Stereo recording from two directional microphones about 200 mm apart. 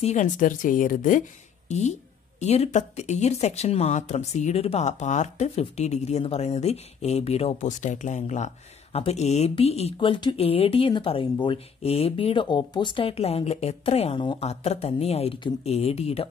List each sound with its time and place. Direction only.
0.0 s speech: 35° left (ahead or behind)